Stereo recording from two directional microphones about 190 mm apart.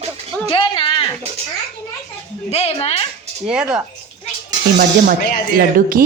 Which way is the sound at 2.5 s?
35° left (ahead or behind).